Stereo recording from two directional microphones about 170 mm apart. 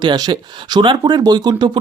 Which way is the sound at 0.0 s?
25° right (ahead or behind).